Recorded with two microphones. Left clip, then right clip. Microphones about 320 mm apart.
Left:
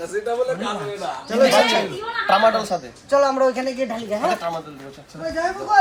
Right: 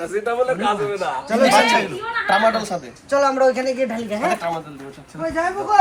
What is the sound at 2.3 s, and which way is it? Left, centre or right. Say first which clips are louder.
A man's voice: left 1 dB; centre.